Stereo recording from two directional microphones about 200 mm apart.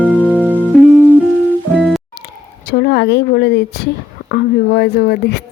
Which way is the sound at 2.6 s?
50° left (ahead or behind).